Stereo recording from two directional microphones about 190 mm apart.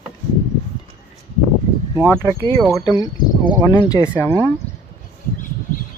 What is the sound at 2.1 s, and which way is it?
Speech, 15° left (ahead or behind).